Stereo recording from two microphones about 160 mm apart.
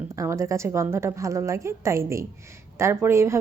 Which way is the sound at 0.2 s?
20° right (ahead or behind).